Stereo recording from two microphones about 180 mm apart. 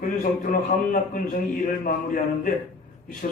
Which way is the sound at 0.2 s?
50° left (ahead or behind).